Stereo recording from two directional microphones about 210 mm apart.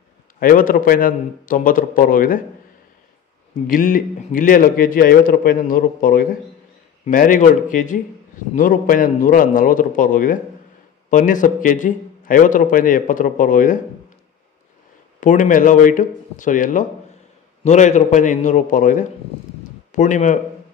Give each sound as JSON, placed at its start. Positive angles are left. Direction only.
{"t": 0.4, "sound": "a man's voice", "side_deg": 40}
{"t": 3.6, "sound": "a man's voice", "side_deg": 40}
{"t": 15.1, "sound": "a man's voice", "side_deg": 40}